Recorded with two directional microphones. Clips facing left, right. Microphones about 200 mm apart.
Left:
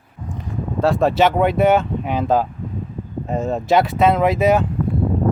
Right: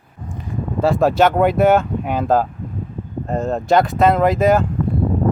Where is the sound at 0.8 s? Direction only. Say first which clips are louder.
Right 1 dB; centre (ahead or behind).